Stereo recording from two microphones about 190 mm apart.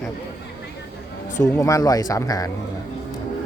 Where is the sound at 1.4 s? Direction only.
15° left (ahead or behind).